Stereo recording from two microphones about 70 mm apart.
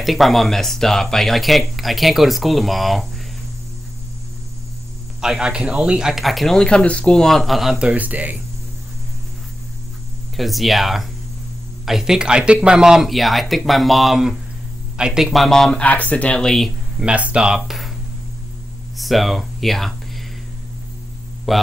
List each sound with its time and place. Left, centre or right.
0.0 s speech: centre
5.2 s speech: centre
7.8 s speech: right
10.3 s speech: centre
15.8 s speech: left; by 16.7 s centre
17.0 s speech: centre
18.9 s speech: centre
21.5 s speech: centre